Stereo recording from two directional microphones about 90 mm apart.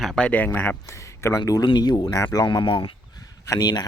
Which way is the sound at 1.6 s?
55° left (ahead or behind).